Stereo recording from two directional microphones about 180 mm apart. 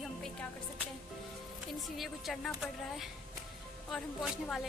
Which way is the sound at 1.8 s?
Centre (ahead or behind).